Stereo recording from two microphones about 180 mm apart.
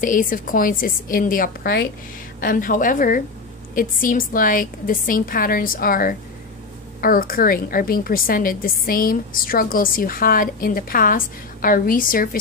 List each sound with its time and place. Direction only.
0.0 s a woman's voice: 50° left (ahead or behind)